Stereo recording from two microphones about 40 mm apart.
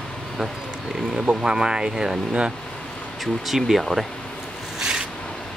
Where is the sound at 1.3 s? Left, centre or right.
Right.